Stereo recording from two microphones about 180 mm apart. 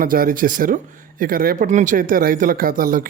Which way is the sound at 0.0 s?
50° right (ahead or behind).